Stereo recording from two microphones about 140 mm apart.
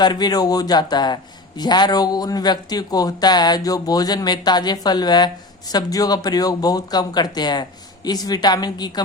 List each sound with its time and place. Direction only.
0.0 s a man's voice: 30° left (ahead or behind)